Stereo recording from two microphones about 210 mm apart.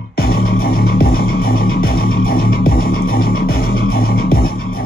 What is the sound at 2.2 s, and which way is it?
Music, 45° left (ahead or behind).